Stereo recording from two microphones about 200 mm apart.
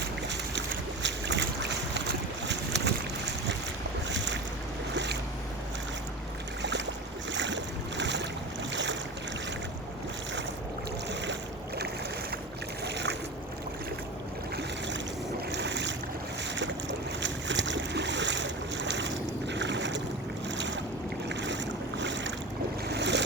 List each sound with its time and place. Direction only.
1.0 s boat: 60° right (ahead or behind)
6.6 s boat: 60° right (ahead or behind)
12.8 s boat: 60° right (ahead or behind)
15.5 s boat: 60° right (ahead or behind)
17.2 s boat: 65° right (ahead or behind)
21.2 s boat: 65° right (ahead or behind)